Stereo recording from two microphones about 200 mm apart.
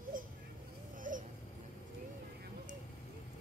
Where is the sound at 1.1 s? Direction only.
40° right (ahead or behind).